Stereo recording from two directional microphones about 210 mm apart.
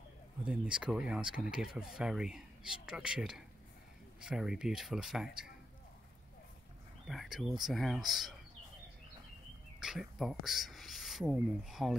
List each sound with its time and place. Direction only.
0.5 s speech: 5° right (ahead or behind)
7.1 s speech: centre (ahead or behind)
9.8 s speech: centre (ahead or behind)